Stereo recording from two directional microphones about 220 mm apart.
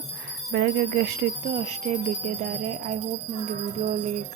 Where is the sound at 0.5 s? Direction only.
50° right (ahead or behind).